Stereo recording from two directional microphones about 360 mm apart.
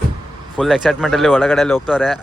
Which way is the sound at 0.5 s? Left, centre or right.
Centre.